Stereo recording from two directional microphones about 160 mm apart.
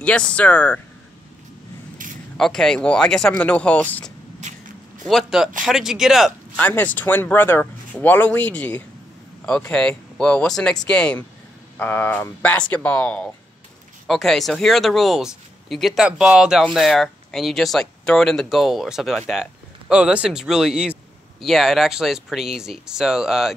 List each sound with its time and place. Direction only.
0.0 s speech: 5° left (ahead or behind)
2.3 s speech: 5° left (ahead or behind)
4.4 s walk: 50° right (ahead or behind)
5.0 s speech: centre (ahead or behind)
6.5 s speech: 10° left (ahead or behind)